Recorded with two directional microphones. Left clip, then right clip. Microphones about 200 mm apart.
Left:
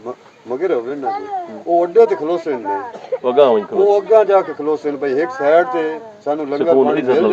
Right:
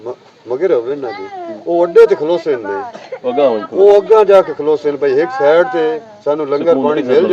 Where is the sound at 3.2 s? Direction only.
45° left (ahead or behind).